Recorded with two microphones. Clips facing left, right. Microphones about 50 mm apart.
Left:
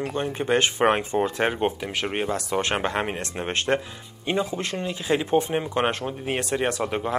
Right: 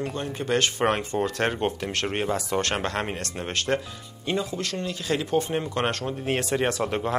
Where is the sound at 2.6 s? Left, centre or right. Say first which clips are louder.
Left 2 dB; centre.